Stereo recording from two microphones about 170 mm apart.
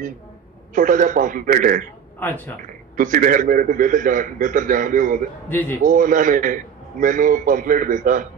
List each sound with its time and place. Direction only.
0.7 s a man's voice: 50° right (ahead or behind)
2.1 s speech: 10° left (ahead or behind)
3.0 s a man's voice: 50° right (ahead or behind)
5.5 s speech: 10° left (ahead or behind)
5.9 s a man's voice: 50° right (ahead or behind)